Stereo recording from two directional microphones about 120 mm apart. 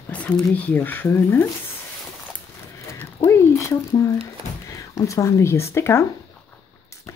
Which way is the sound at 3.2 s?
25° left (ahead or behind).